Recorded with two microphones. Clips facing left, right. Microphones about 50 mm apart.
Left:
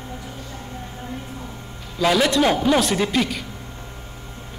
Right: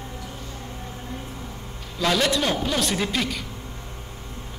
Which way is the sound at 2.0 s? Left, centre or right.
Centre.